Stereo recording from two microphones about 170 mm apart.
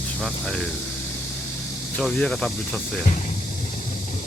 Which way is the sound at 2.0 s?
5° left (ahead or behind).